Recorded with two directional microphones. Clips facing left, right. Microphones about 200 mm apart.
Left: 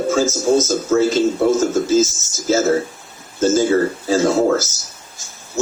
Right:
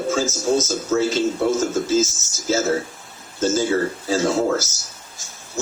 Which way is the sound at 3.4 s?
50° left (ahead or behind).